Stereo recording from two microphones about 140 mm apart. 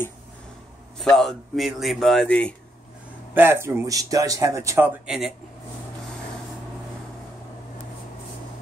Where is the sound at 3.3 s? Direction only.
15° right (ahead or behind).